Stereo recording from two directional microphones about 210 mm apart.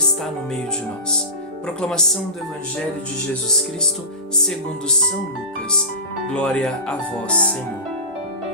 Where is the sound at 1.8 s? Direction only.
5° left (ahead or behind).